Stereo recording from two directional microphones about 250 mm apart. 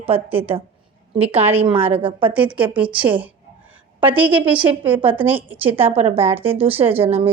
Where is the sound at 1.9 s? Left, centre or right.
Right.